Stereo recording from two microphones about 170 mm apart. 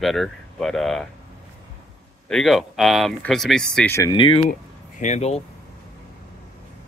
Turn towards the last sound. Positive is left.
turn(degrees=40)  # may be behind; listen again after turning